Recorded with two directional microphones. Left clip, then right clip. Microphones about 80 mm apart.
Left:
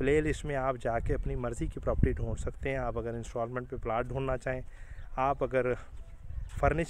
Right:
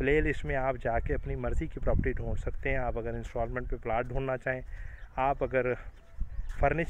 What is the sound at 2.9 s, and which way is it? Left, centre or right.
Speech, left.